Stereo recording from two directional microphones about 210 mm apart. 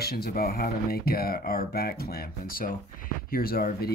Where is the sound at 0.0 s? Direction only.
50° left (ahead or behind).